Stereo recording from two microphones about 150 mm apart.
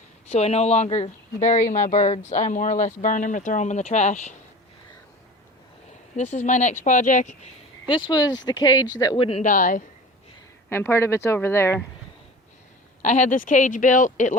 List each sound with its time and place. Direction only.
0.3 s speech: 45° left (ahead or behind)
6.1 s speech: 50° left (ahead or behind)
7.9 s speech: 30° left (ahead or behind)
9.4 s speech: 60° left (ahead or behind)
10.7 s speech: 15° left (ahead or behind)
13.0 s speech: 55° left (ahead or behind)